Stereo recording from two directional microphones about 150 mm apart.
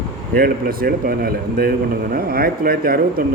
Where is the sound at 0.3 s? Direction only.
75° right (ahead or behind).